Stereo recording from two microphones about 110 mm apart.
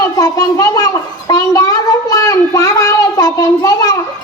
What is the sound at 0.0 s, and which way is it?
Speech, 30° left (ahead or behind).